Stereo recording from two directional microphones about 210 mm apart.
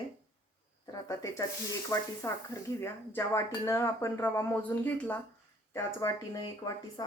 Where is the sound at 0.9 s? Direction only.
15° left (ahead or behind).